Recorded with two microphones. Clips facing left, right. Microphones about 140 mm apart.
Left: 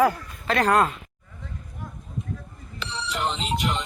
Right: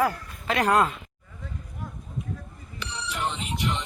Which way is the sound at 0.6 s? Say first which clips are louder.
Left 1 dB; 15° right (ahead or behind).